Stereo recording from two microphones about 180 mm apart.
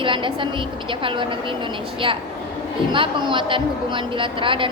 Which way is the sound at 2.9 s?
25° right (ahead or behind).